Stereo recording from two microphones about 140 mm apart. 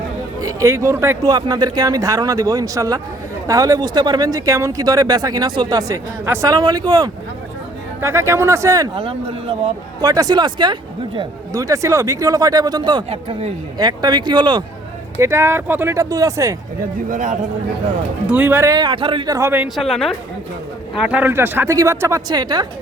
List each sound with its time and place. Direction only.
0.6 s speech: 20° right (ahead or behind)
9.0 s speech: 40° right (ahead or behind)
10.0 s speech: 25° right (ahead or behind)
11.5 s speech: 25° right (ahead or behind)
15.2 s speech: 15° right (ahead or behind)
17.1 s a man's voice: 65° right (ahead or behind)
18.3 s speech: 10° right (ahead or behind); by 19.3 s 40° right (ahead or behind)
19.3 s speech: 20° right (ahead or behind)
19.6 s a woman's voice: centre (ahead or behind); by 22.6 s 30° right (ahead or behind)